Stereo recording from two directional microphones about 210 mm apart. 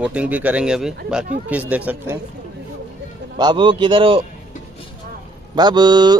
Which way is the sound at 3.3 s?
20° right (ahead or behind).